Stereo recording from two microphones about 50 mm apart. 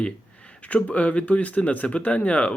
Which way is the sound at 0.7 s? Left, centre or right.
Left.